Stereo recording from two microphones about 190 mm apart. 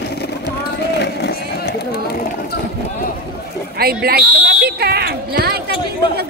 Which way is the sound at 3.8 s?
55° right (ahead or behind).